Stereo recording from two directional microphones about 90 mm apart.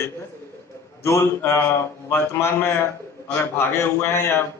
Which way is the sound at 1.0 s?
30° left (ahead or behind).